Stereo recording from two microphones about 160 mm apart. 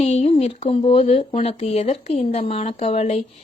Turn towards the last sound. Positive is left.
turn(degrees=40)  # may be behind; listen again after turning